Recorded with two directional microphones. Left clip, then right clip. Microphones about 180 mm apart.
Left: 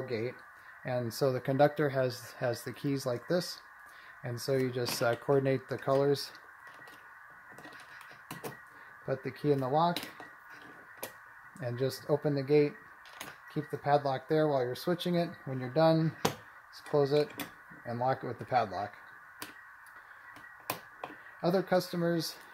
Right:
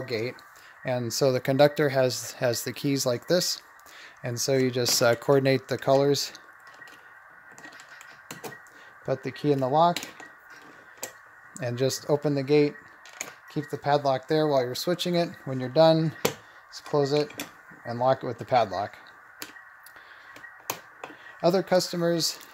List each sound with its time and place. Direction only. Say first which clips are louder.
0.0 s speech: right 5 dB; 55° right (ahead or behind)
9.0 s speech: right 5 dB; 40° right (ahead or behind)
11.6 s speech: right 7 dB; 45° right (ahead or behind)
21.4 s speech: right 7 dB; 45° right (ahead or behind)